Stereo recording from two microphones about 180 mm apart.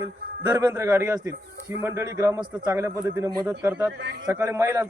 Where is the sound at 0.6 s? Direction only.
15° right (ahead or behind).